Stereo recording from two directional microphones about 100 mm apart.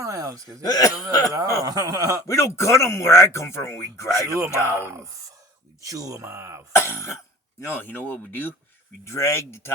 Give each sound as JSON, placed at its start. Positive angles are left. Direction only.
{"t": 0.0, "sound": "a sound", "side_deg": -35}
{"t": 0.6, "sound": "speech", "side_deg": 40}
{"t": 1.3, "sound": "speech", "side_deg": -35}
{"t": 2.2, "sound": "speech", "side_deg": 30}
{"t": 4.3, "sound": "speech", "side_deg": -30}
{"t": 4.5, "sound": "speech", "side_deg": 25}
{"t": 5.8, "sound": "speech", "side_deg": -35}
{"t": 6.7, "sound": "speech", "side_deg": 25}